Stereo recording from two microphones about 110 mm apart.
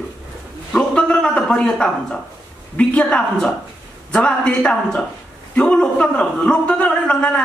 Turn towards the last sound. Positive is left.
turn(degrees=10)  # may be behind; listen again after turning